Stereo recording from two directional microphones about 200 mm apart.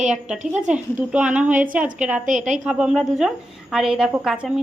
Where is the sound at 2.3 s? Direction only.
40° right (ahead or behind).